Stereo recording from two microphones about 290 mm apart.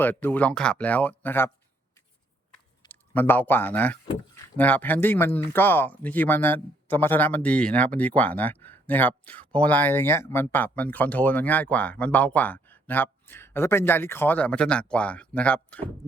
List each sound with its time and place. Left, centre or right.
0.0 s speech: centre
2.8 s speech: centre